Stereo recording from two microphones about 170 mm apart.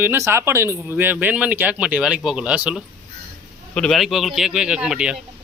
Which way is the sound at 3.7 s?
5° left (ahead or behind).